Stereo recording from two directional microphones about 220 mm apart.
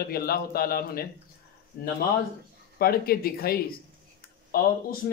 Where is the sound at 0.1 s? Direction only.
45° left (ahead or behind).